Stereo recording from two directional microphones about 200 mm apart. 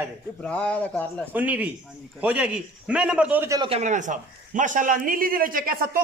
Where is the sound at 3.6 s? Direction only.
35° right (ahead or behind).